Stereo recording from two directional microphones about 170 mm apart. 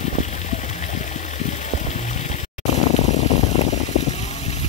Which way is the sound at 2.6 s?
40° left (ahead or behind).